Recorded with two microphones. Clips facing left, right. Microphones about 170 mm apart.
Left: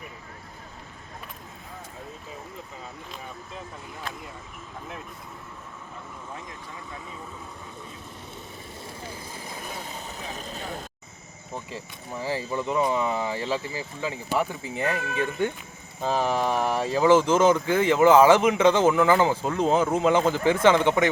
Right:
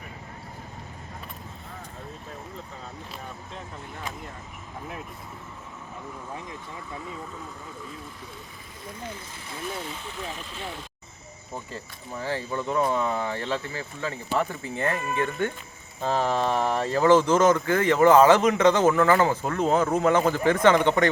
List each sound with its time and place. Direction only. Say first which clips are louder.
9.9 s speech: right 1 dB; 40° left (ahead or behind)
12.2 s speech: left 1 dB; 5° left (ahead or behind)
14.9 s speech: right 1 dB; 90° left
16.0 s speech: even; 10° left (ahead or behind)
20.8 s speech: even; 5° left (ahead or behind)